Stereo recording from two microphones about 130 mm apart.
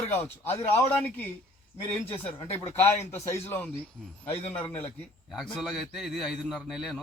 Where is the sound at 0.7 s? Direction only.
15° left (ahead or behind).